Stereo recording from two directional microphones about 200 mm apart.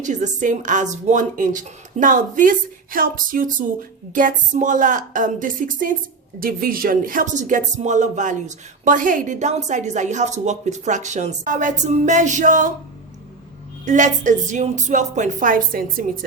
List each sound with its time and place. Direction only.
0.0 s speech: 40° right (ahead or behind)
13.8 s speech: 40° right (ahead or behind)